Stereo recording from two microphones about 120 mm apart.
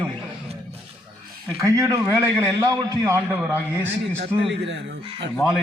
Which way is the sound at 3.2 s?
15° right (ahead or behind).